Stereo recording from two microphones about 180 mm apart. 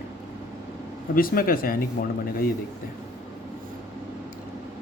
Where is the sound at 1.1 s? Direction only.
55° left (ahead or behind).